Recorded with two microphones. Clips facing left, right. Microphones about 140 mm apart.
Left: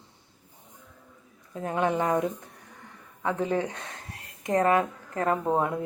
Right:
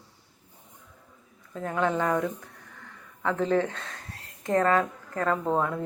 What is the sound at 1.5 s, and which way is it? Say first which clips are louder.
A woman's voice: even; 20° left (ahead or behind).